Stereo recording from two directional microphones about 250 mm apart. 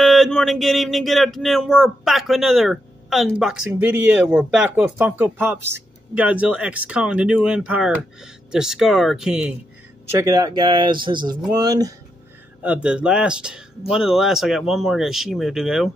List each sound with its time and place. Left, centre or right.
0.0 s speech: centre
10.1 s speech: centre
12.6 s speech: centre